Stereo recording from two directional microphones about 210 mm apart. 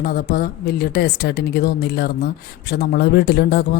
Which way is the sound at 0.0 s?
45° left (ahead or behind).